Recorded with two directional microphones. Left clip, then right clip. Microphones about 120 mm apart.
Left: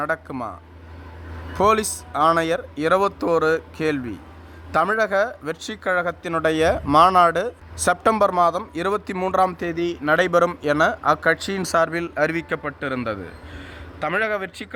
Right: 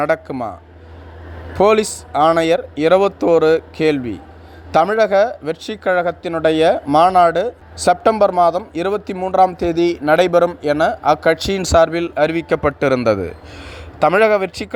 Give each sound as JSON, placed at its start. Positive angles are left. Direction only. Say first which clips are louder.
{"t": 0.3, "sound": "speech", "louder": "right 6 dB", "side_deg": -15}
{"t": 1.5, "sound": "speech", "louder": "right 5 dB", "side_deg": -10}
{"t": 12.6, "sound": "a man's voice", "louder": "right 11 dB", "side_deg": -40}